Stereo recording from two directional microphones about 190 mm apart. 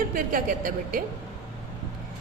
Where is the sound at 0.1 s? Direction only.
45° right (ahead or behind).